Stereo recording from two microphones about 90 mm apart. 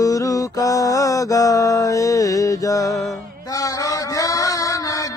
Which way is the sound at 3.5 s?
40° left (ahead or behind).